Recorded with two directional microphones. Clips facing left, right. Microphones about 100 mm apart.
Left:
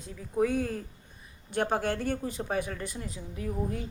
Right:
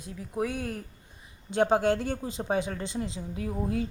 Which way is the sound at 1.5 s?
20° right (ahead or behind).